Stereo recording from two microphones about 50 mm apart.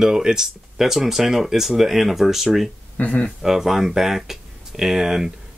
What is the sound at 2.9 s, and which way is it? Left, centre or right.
Speech, left.